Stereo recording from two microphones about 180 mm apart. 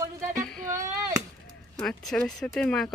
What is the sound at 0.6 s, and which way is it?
Speech, 45° right (ahead or behind).